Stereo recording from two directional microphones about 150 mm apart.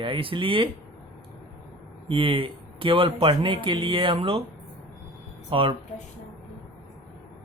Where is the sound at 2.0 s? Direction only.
35° right (ahead or behind).